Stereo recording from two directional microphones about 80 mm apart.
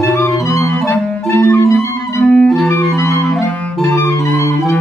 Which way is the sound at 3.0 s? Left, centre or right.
Left.